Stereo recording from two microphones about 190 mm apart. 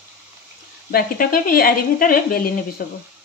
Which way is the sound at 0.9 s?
50° left (ahead or behind).